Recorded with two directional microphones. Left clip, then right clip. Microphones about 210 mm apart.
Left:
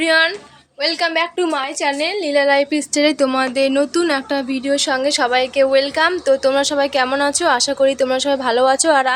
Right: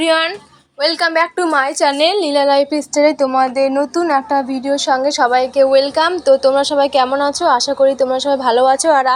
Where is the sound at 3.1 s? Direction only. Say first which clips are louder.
Right 3 dB; 25° left (ahead or behind).